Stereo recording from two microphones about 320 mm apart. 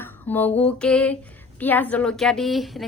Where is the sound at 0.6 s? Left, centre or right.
Centre.